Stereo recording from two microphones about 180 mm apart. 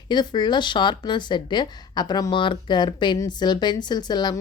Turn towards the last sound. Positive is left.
turn(degrees=25)  # may be behind; listen again after turning